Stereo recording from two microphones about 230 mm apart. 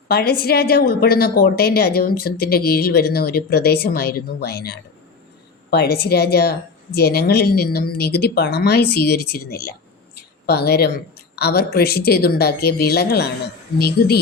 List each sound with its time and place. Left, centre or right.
0.1 s a woman's voice: left